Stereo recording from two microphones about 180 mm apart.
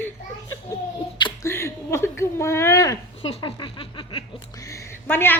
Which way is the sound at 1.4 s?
15° left (ahead or behind).